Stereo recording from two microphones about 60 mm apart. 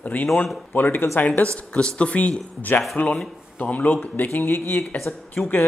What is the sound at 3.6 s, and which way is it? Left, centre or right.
Speech, left.